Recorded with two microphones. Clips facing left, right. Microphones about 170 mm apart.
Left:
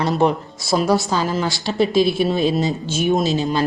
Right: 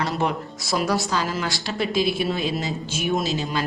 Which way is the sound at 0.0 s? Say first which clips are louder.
Left 7 dB; 25° left (ahead or behind).